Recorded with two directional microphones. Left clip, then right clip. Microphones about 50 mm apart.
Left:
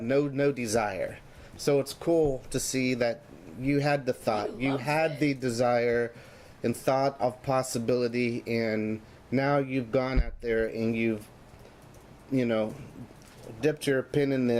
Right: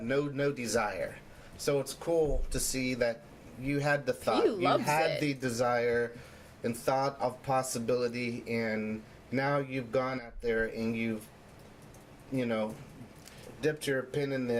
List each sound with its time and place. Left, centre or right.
0.0 s speech: centre
13.6 s speech: left